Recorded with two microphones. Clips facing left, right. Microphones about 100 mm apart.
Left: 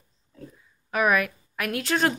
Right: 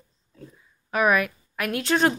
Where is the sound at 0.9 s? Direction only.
Centre (ahead or behind).